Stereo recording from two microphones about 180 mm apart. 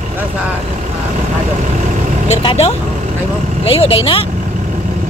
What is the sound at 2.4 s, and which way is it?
Speech, 35° left (ahead or behind).